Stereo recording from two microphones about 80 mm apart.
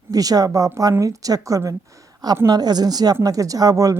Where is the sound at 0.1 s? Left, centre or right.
Right.